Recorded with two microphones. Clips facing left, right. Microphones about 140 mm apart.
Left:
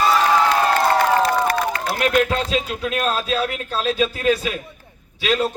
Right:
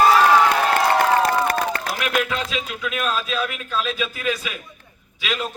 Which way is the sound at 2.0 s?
35° left (ahead or behind).